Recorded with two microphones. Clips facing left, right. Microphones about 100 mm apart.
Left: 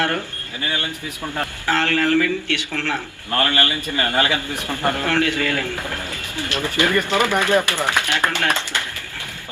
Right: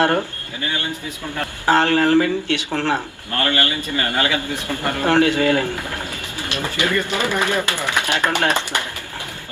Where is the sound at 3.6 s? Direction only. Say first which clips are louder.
Even; 25° left (ahead or behind).